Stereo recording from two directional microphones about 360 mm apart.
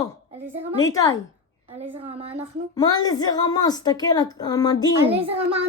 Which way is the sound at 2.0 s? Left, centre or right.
Centre.